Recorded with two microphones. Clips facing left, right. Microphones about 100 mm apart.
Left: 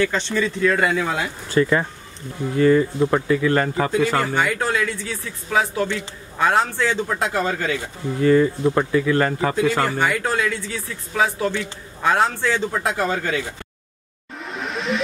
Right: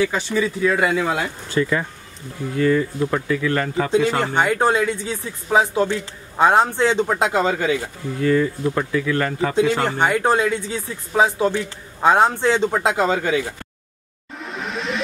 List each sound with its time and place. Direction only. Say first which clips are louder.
0.0 s speech: right 1 dB; 10° right (ahead or behind)
1.5 s speech: left 3 dB; 35° left (ahead or behind)
4.2 s speech: right 3 dB; 20° right (ahead or behind)
8.2 s speech: left 3 dB; 30° left (ahead or behind)
9.6 s speech: right 3 dB; 20° right (ahead or behind)
14.4 s music: even; centre (ahead or behind)